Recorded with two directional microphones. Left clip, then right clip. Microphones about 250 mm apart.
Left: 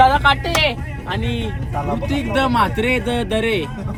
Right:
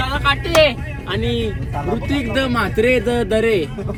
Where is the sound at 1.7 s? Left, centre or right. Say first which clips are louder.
Left 2 dB; centre.